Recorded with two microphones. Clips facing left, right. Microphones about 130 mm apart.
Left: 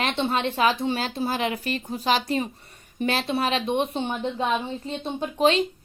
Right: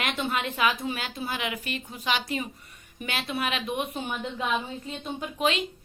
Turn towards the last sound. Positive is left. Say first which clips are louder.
# left 6 dB
turn(degrees=35)  # may be behind; listen again after turning